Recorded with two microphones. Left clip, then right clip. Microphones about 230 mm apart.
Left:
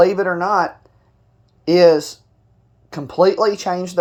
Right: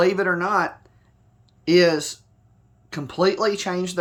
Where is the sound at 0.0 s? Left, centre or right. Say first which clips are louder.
Left 5 dB; right.